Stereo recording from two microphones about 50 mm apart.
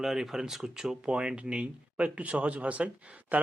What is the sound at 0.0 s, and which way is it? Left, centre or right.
Speech, centre.